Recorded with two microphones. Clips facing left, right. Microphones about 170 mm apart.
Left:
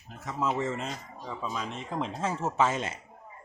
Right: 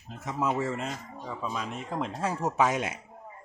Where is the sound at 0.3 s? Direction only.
10° right (ahead or behind).